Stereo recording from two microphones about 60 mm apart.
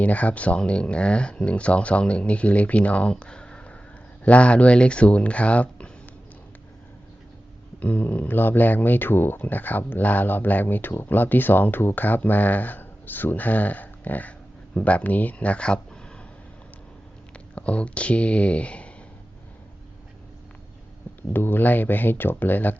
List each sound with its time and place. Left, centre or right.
0.0 s speech: left
7.8 s speech: left
17.5 s speech: left
21.2 s speech: left